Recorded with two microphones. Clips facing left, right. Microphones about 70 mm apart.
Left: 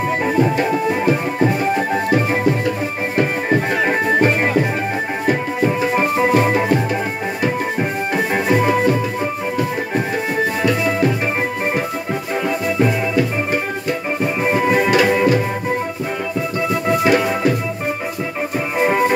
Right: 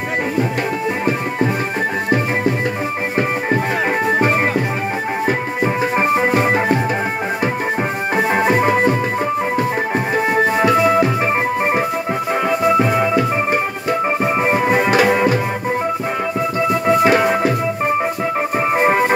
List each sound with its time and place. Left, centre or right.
5.9 s music: right
9.9 s music: right
14.5 s music: right
18.8 s music: right